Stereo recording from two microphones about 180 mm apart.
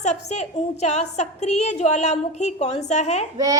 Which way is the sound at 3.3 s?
20° right (ahead or behind).